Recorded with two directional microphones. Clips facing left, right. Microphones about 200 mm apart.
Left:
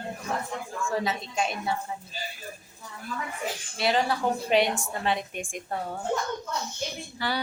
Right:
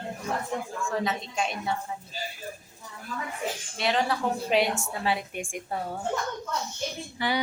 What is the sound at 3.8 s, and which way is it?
A woman's voice, centre (ahead or behind).